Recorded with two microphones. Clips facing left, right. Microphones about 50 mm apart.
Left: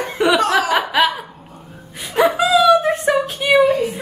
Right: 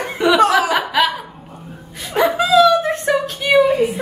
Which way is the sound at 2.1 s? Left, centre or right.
Centre.